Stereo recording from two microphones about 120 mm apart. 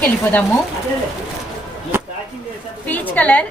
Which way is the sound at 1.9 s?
20° right (ahead or behind).